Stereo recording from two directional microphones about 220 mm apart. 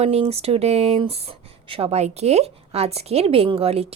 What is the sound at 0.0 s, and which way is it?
A woman's voice, 30° right (ahead or behind).